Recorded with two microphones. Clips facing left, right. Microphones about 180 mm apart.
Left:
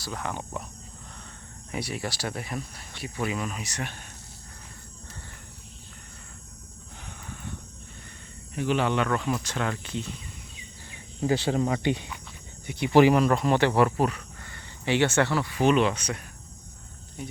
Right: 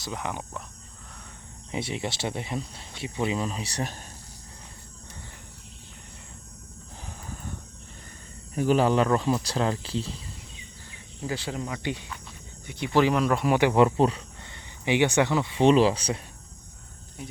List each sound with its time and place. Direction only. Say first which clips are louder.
0.0 s speech: even; 15° right (ahead or behind)
1.7 s speech: right 1 dB; 20° right (ahead or behind)
8.5 s speech: right 4 dB; 40° right (ahead or behind)
11.2 s speech: left 7 dB; 25° left (ahead or behind)
12.6 s speech: left 4 dB; 10° left (ahead or behind)
13.1 s speech: left 1 dB; centre (ahead or behind); by 16.2 s 30° right (ahead or behind)